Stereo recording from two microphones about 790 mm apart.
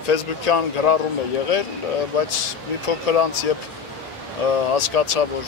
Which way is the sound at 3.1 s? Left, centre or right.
Left.